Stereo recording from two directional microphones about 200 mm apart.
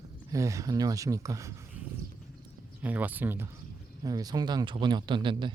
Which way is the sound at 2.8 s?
10° right (ahead or behind).